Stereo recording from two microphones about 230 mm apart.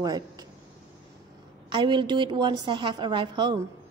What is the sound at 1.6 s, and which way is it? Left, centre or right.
A woman's voice, right.